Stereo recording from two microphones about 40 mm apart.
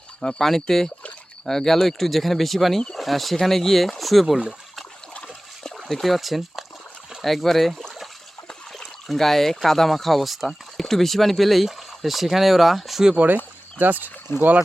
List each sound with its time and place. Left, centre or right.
0.3 s speech: centre
5.9 s speech: centre
8.4 s a sound: centre
9.6 s speech: centre
13.1 s speech: right
14.3 s speech: left